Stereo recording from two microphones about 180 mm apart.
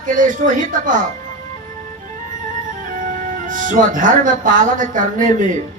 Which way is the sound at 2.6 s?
50° right (ahead or behind).